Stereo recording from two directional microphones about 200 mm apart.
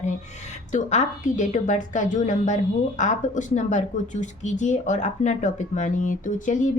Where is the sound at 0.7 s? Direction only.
35° left (ahead or behind).